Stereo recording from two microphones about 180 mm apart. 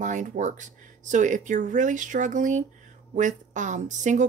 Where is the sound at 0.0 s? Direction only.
45° right (ahead or behind).